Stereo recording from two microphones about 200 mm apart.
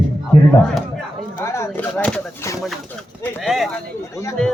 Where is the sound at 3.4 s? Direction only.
Centre (ahead or behind).